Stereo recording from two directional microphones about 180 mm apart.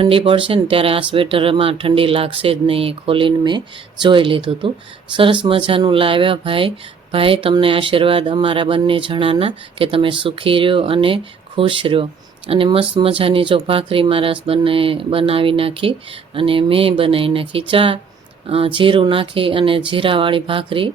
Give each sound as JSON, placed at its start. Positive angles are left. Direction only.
{"t": 0.0, "sound": "speech", "side_deg": -30}